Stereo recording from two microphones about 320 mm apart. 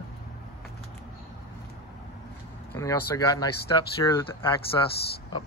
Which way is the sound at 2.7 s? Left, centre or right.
Centre.